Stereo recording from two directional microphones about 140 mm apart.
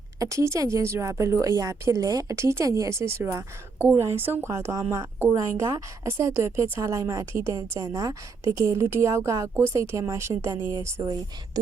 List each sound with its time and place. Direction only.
0.2 s a woman's voice: 20° right (ahead or behind)
11.0 s speech: 30° right (ahead or behind)